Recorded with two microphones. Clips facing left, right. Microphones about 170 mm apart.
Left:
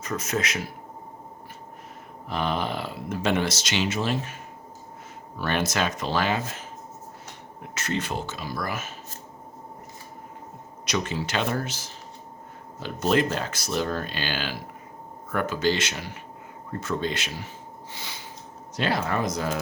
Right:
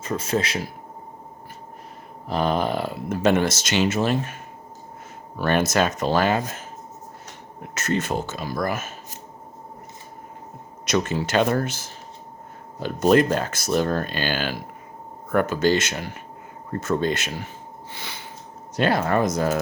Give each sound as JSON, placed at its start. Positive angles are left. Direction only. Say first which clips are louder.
{"t": 0.0, "sound": "speech", "louder": "right 4 dB", "side_deg": -30}
{"t": 2.2, "sound": "speech", "louder": "right 5 dB", "side_deg": -40}
{"t": 5.4, "sound": "speech", "louder": "right 5 dB", "side_deg": -45}
{"t": 7.7, "sound": "speech", "louder": "right 5 dB", "side_deg": -45}
{"t": 10.8, "sound": "speech", "louder": "right 5 dB", "side_deg": -50}
{"t": 17.9, "sound": "a sound", "louder": "right 3 dB", "side_deg": -60}
{"t": 18.8, "sound": "speech", "louder": "right 5 dB", "side_deg": -50}